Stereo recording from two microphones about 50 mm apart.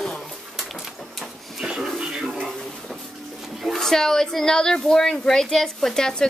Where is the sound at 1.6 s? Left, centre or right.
Centre.